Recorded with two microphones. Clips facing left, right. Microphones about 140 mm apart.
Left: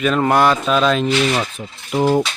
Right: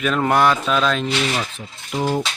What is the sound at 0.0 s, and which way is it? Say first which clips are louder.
Speech: left 2 dB; centre (ahead or behind).